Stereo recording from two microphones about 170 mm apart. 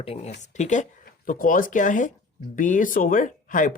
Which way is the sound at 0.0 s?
35° left (ahead or behind).